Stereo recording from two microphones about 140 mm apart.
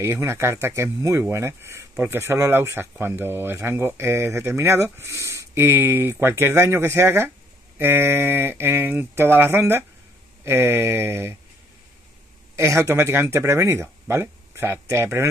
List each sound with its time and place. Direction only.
0.0 s speech: 20° right (ahead or behind)
12.5 s speech: 20° right (ahead or behind)